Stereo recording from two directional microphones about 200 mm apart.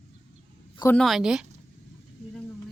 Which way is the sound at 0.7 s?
15° left (ahead or behind).